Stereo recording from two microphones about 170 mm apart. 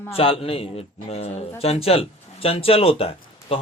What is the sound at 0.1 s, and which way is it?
A man's voice, 35° left (ahead or behind).